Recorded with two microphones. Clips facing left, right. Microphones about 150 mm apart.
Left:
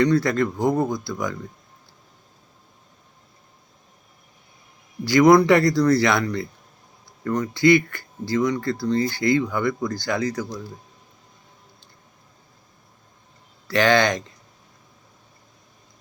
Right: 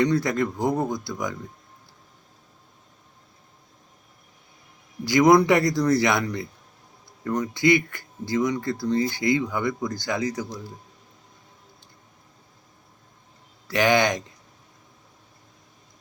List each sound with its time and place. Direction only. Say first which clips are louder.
0.0 s speech: left 3 dB; 20° right (ahead or behind)
5.0 s speech: left 2 dB; 20° right (ahead or behind)
13.7 s speech: left 2 dB; 15° right (ahead or behind)